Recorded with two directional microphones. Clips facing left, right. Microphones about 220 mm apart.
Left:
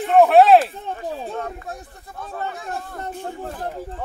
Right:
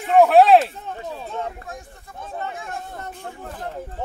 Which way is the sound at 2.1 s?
35° left (ahead or behind).